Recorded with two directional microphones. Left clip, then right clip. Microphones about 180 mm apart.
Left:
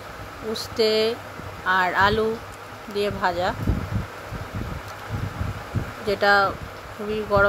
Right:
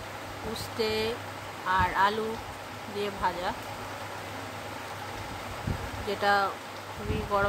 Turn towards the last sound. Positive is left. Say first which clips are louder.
# left 8 dB
turn(degrees=25)  # may be behind; listen again after turning